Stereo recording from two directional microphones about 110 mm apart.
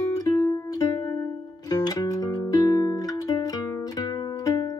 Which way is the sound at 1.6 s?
35° left (ahead or behind).